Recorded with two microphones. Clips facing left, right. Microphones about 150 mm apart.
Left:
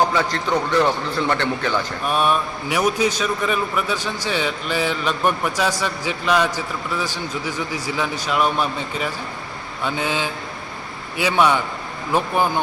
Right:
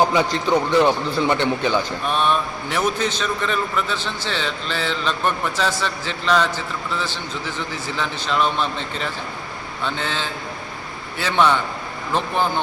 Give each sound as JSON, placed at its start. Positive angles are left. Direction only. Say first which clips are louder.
{"t": 0.1, "sound": "a man's voice", "louder": "right 2 dB", "side_deg": -15}
{"t": 2.0, "sound": "a man's voice", "louder": "left 3 dB", "side_deg": 10}